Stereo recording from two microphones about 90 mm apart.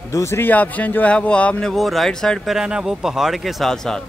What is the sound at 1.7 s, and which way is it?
Speech, centre (ahead or behind).